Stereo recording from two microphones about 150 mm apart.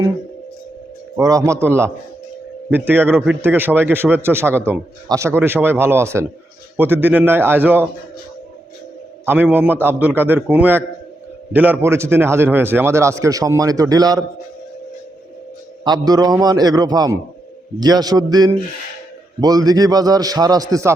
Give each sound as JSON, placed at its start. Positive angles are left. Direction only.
{"t": 1.2, "sound": "a man's voice", "side_deg": -20}
{"t": 9.2, "sound": "a man's voice", "side_deg": -15}
{"t": 15.8, "sound": "a man's voice", "side_deg": -25}